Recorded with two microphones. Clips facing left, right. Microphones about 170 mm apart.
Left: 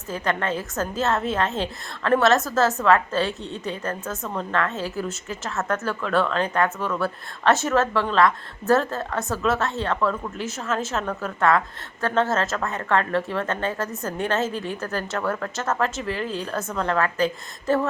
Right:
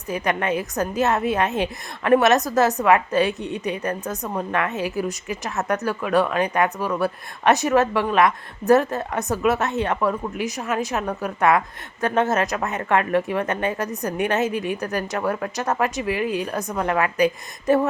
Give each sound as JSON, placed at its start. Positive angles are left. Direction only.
{"t": 0.1, "sound": "a woman's voice", "side_deg": -15}